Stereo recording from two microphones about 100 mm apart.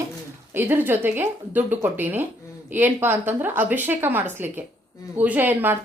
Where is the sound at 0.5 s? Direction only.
20° right (ahead or behind).